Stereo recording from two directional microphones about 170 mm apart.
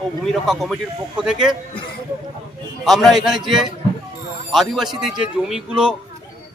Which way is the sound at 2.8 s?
Centre (ahead or behind).